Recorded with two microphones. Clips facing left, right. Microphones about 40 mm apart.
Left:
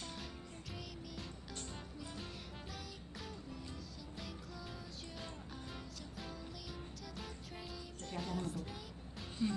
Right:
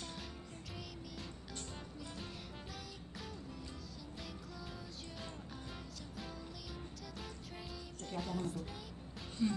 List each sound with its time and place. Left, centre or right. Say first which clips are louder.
0.0 s music: even; centre